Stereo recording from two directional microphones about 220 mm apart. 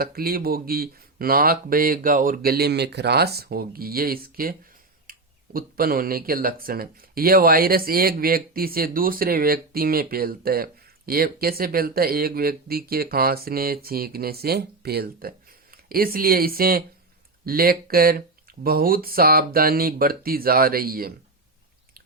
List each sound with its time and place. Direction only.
0.0 s speech: 45° right (ahead or behind)
5.1 s a sound: 40° right (ahead or behind)
5.5 s speech: 40° right (ahead or behind)